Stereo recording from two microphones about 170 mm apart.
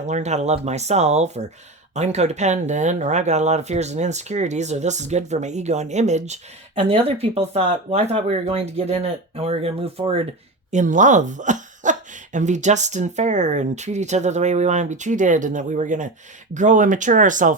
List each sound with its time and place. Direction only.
0.0 s speech: 40° right (ahead or behind)
10.7 s speech: 45° right (ahead or behind)